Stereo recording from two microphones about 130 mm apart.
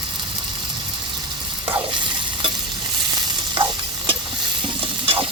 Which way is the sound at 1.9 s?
40° right (ahead or behind).